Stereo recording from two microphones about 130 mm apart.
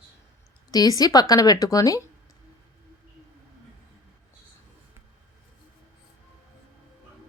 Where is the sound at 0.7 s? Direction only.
30° left (ahead or behind).